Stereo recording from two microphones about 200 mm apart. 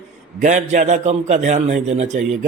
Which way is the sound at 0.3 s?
35° right (ahead or behind).